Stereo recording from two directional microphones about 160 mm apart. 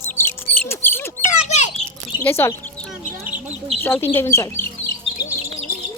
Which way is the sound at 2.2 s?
15° left (ahead or behind).